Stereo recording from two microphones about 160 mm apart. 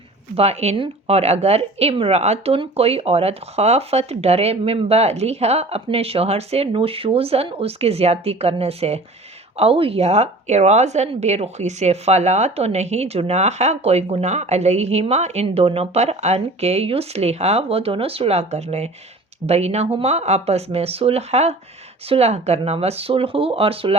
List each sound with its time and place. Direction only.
0.3 s a woman's voice: 40° right (ahead or behind)